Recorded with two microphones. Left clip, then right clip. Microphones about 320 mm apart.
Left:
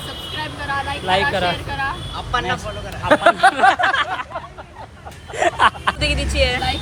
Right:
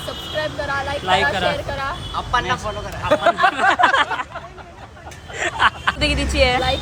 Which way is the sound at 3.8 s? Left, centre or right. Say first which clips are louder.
Right 2 dB; centre.